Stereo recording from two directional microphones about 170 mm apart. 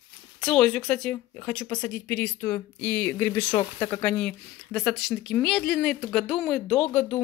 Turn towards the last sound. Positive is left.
turn(degrees=5)  # may be behind; listen again after turning